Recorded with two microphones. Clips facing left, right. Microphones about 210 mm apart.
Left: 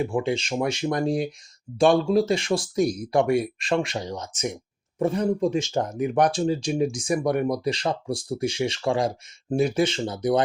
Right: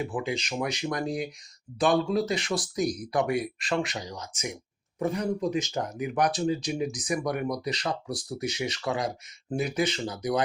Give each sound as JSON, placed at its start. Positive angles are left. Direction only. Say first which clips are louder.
{"t": 0.0, "sound": "speech", "louder": "left 6 dB", "side_deg": 25}